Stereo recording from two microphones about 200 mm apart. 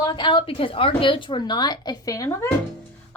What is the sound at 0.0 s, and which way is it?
Speech, 25° left (ahead or behind).